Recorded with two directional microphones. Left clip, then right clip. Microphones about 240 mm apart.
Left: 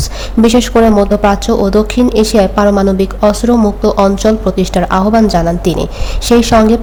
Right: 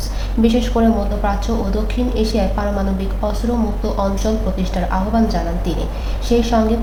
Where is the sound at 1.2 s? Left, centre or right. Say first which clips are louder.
Left 11 dB; left.